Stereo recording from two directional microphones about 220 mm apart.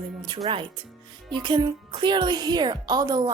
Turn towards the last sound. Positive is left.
turn(degrees=-15)  # may be behind; listen again after turning